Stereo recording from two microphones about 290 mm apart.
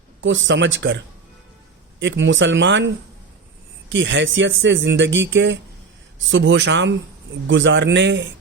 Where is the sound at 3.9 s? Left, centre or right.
Right.